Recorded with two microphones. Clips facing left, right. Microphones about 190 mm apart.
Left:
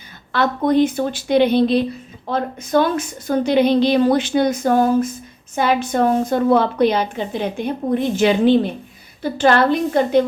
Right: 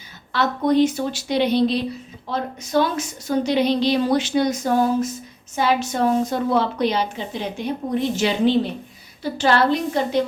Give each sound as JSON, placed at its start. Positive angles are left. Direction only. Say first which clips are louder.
{"t": 0.3, "sound": "a woman's voice", "louder": "left 2 dB", "side_deg": 55}